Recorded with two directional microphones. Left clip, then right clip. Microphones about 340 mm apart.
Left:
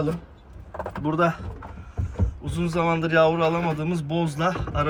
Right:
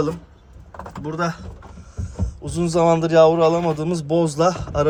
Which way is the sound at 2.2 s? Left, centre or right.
Centre.